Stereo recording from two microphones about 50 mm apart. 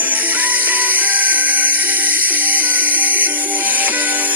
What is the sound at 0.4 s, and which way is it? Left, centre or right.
Music, right.